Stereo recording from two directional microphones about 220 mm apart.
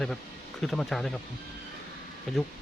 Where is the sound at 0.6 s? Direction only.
Centre (ahead or behind).